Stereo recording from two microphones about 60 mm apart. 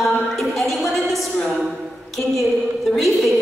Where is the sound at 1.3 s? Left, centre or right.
Left.